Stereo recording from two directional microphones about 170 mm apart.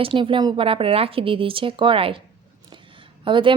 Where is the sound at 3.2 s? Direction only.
30° right (ahead or behind).